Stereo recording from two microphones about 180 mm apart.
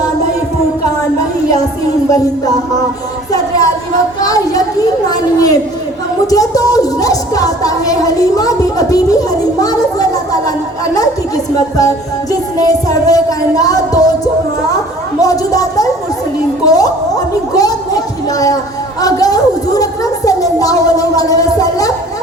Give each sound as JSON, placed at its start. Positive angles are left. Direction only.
{"t": 4.2, "sound": "music", "side_deg": 20}
{"t": 6.3, "sound": "a woman's voice", "side_deg": 20}
{"t": 11.5, "sound": "music", "side_deg": 20}
{"t": 15.2, "sound": "music", "side_deg": 20}
{"t": 16.6, "sound": "a sound", "side_deg": 20}